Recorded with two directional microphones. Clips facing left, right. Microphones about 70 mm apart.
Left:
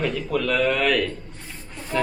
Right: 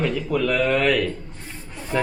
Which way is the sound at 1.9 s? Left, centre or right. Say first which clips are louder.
Right 1 dB; centre.